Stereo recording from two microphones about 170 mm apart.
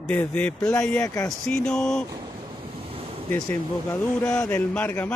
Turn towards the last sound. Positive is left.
turn(degrees=10)  # may be behind; listen again after turning